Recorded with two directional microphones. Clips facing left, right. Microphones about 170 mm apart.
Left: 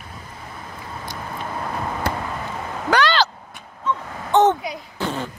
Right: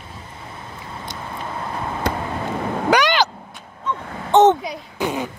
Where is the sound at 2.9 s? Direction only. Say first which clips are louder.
Right 1 dB; 15° right (ahead or behind).